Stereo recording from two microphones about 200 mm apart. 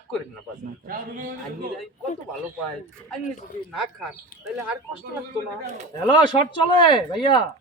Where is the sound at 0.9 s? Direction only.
45° right (ahead or behind).